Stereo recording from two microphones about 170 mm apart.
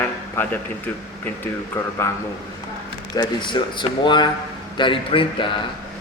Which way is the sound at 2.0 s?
15° left (ahead or behind).